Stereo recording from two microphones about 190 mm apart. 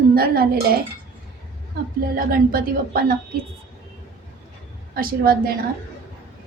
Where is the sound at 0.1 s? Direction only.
50° right (ahead or behind).